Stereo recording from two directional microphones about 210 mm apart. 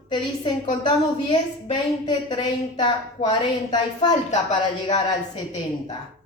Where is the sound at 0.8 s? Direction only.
20° left (ahead or behind).